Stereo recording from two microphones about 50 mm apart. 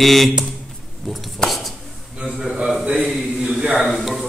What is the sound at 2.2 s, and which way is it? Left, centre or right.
A man's voice, centre.